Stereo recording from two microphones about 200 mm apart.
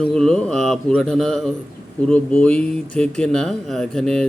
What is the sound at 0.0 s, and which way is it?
Speech, 5° left (ahead or behind).